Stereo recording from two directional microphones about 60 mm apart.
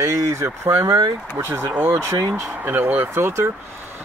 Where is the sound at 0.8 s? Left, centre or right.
Right.